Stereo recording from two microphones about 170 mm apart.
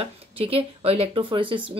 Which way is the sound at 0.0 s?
35° right (ahead or behind).